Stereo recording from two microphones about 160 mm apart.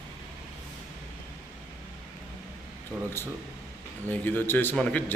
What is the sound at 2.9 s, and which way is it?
Speech, 5° right (ahead or behind).